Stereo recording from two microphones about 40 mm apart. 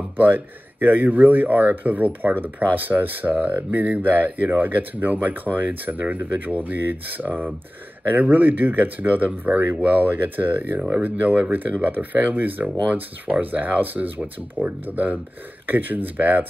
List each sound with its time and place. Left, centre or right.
0.7 s speech: right